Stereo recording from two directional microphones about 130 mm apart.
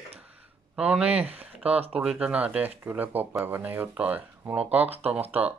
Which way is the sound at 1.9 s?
10° right (ahead or behind).